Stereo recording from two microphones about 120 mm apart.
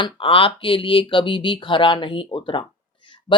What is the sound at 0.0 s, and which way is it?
Speech, 45° left (ahead or behind).